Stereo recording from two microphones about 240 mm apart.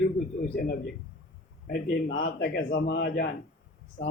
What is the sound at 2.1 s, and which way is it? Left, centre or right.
A man's voice, left.